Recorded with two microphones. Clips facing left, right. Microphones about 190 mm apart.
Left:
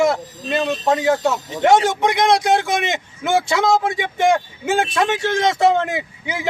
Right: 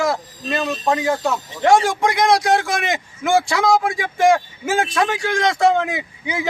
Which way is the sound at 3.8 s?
20° left (ahead or behind).